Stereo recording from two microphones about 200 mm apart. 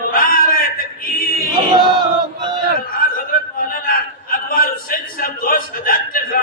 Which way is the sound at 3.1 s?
45° left (ahead or behind).